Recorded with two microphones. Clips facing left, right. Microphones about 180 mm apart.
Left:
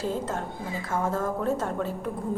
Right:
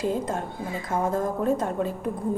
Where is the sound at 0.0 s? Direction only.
15° right (ahead or behind).